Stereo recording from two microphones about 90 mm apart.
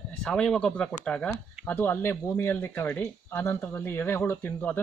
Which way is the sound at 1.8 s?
25° left (ahead or behind).